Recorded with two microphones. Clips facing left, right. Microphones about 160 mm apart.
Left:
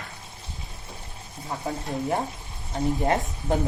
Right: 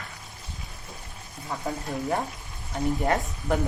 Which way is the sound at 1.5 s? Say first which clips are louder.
Left 1 dB; 20° left (ahead or behind).